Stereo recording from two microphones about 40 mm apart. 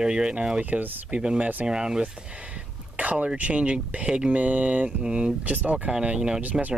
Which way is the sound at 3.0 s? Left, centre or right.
Right.